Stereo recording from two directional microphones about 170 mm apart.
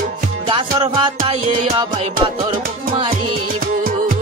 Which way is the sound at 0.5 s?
30° right (ahead or behind).